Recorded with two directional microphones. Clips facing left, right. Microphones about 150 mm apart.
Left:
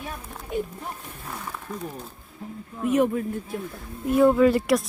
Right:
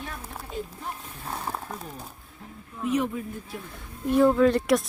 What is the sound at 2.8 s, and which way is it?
Speech, 50° left (ahead or behind).